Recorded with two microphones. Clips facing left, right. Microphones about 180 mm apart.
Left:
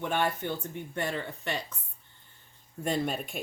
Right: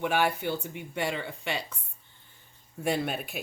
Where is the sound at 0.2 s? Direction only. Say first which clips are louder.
Right 2 dB; 10° right (ahead or behind).